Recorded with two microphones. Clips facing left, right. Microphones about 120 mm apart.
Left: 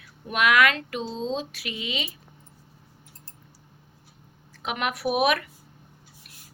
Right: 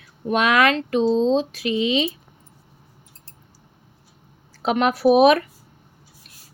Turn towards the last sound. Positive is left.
turn(degrees=-30)  # may be behind; listen again after turning